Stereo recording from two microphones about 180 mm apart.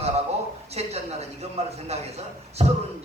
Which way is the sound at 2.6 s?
35° right (ahead or behind).